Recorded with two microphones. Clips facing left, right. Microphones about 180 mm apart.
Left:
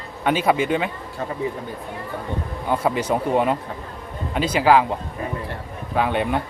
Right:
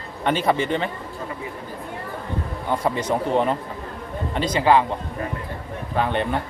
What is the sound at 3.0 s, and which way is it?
A man's voice, 10° left (ahead or behind).